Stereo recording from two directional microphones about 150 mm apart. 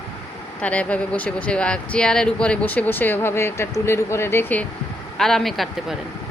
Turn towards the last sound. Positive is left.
turn(degrees=0)  # may be behind; listen again after turning